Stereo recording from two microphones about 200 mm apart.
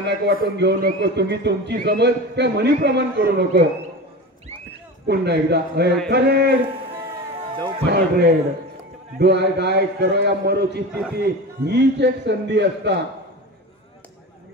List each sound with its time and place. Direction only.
0.0 s a man's voice: 55° right (ahead or behind)
5.0 s a man's voice: 55° right (ahead or behind)
7.8 s a man's voice: 55° right (ahead or behind)